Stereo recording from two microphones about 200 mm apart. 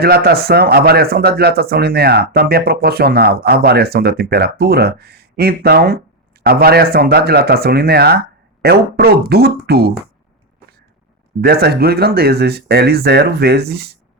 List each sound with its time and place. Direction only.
0.0 s speech: 50° right (ahead or behind)
11.3 s speech: 50° right (ahead or behind)